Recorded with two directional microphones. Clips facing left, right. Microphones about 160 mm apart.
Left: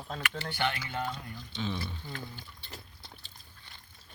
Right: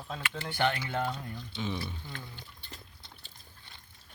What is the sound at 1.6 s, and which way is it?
Speech, 15° right (ahead or behind).